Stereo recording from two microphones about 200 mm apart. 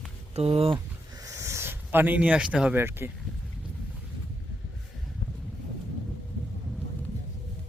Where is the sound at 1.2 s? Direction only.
15° right (ahead or behind).